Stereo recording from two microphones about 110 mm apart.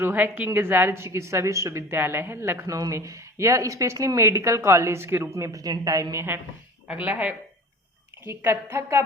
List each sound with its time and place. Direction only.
0.0 s speech: 20° right (ahead or behind)